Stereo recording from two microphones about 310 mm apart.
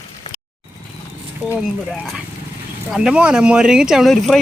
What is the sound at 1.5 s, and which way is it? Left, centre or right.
Speech, centre.